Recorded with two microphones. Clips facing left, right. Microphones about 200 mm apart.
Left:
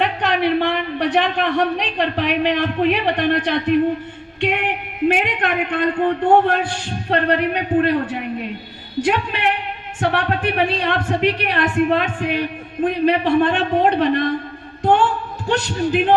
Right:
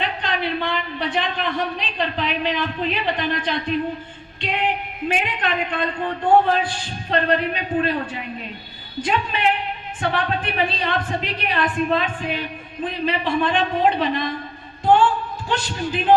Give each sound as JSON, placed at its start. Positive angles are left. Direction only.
{"t": 0.0, "sound": "a man's voice", "side_deg": 65}
{"t": 4.4, "sound": "a sound", "side_deg": 65}
{"t": 7.1, "sound": "a man's voice", "side_deg": 65}